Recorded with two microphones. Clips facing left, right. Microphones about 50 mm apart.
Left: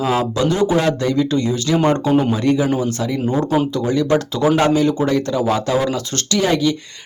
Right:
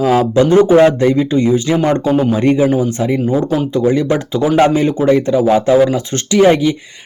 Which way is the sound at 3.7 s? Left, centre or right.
Right.